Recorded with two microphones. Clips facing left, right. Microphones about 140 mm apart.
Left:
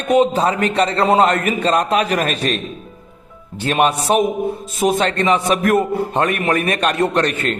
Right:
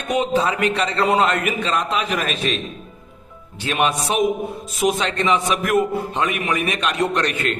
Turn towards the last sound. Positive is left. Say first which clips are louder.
# left 3 dB
turn(degrees=35)  # may be behind; listen again after turning